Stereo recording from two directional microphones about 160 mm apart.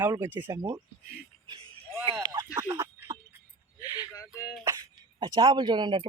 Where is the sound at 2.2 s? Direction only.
25° right (ahead or behind).